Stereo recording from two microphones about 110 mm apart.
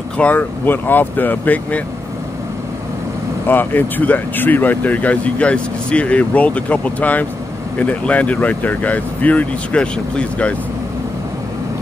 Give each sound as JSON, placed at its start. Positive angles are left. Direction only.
{"t": 0.2, "sound": "speech", "side_deg": 15}
{"t": 3.4, "sound": "speech", "side_deg": 15}